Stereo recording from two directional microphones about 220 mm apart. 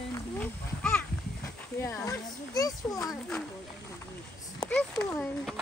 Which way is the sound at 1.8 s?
10° left (ahead or behind).